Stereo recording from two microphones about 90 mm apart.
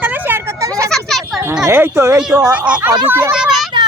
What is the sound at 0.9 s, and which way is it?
Children playing, 5° left (ahead or behind).